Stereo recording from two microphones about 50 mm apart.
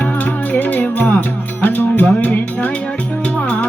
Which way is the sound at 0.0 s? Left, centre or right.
Left.